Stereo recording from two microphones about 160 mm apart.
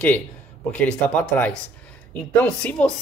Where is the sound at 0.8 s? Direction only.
5° left (ahead or behind).